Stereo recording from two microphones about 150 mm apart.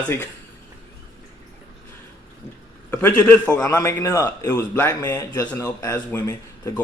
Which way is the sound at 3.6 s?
25° left (ahead or behind).